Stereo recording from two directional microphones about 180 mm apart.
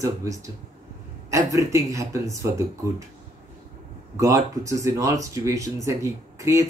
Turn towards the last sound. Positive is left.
turn(degrees=-15)  # may be behind; listen again after turning